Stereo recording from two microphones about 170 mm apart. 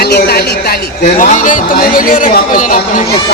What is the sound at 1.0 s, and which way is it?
A man's voice, 45° left (ahead or behind).